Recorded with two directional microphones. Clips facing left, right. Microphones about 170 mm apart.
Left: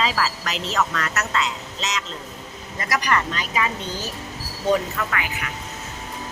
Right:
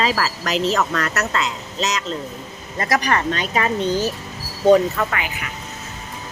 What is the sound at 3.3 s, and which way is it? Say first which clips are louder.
Speech: right 4 dB; 50° right (ahead or behind).